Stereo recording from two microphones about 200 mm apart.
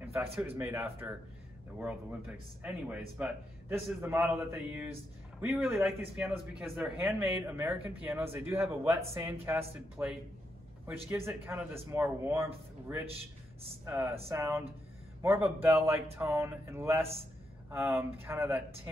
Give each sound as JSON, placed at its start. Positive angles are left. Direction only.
{"t": 0.0, "sound": "speech", "side_deg": -10}